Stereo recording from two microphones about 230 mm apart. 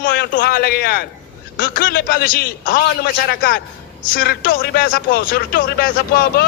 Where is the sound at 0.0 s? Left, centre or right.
Left.